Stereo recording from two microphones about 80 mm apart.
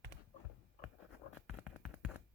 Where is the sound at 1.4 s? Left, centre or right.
Centre.